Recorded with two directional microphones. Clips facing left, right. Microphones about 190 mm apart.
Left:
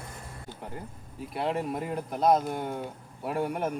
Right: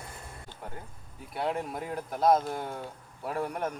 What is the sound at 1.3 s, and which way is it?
Speech, centre (ahead or behind).